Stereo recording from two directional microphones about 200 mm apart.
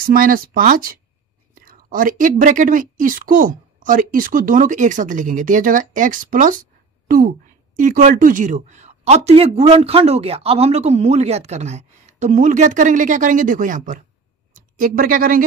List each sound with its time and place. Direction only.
0.0 s a woman's voice: 45° right (ahead or behind)